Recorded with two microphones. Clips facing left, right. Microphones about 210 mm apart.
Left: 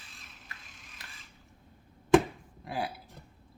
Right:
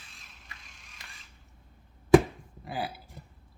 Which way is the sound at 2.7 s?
Centre (ahead or behind).